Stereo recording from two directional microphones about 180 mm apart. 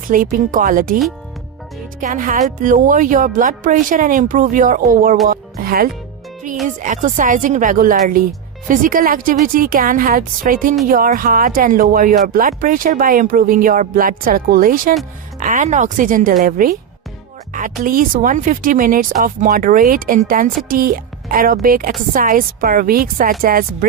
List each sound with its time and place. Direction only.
0.1 s speech: 50° right (ahead or behind)
2.0 s speech: 45° right (ahead or behind)
17.8 s speech: 50° right (ahead or behind)